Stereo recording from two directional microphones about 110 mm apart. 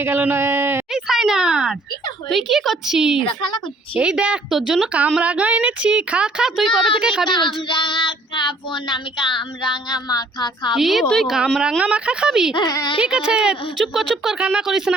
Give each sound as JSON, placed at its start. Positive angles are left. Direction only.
{"t": 0.0, "sound": "a man's voice", "side_deg": -20}
{"t": 0.9, "sound": "a sound", "side_deg": -5}
{"t": 2.3, "sound": "a woman's voice", "side_deg": 0}
{"t": 3.2, "sound": "child singing", "side_deg": 45}
{"t": 3.9, "sound": "a woman's voice", "side_deg": -10}
{"t": 7.3, "sound": "child singing", "side_deg": 45}
{"t": 10.8, "sound": "a woman's voice", "side_deg": 0}
{"t": 12.5, "sound": "speech", "side_deg": 40}
{"t": 13.0, "sound": "speech", "side_deg": -10}